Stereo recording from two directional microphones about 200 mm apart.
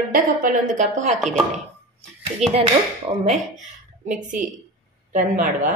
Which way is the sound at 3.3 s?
40° right (ahead or behind).